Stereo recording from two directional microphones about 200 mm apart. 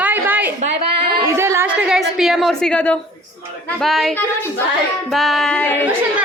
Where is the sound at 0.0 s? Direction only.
10° right (ahead or behind).